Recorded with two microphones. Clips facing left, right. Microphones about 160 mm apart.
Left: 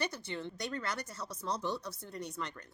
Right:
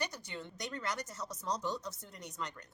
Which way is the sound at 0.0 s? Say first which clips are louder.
Left 3 dB; 15° right (ahead or behind).